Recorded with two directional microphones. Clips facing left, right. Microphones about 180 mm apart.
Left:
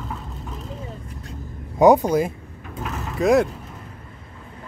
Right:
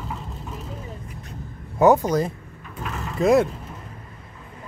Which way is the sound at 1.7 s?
15° left (ahead or behind).